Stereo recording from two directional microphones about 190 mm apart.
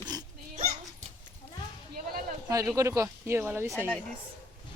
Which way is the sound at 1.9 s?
50° right (ahead or behind).